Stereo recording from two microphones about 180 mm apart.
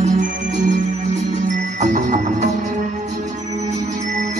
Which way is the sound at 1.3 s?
45° right (ahead or behind).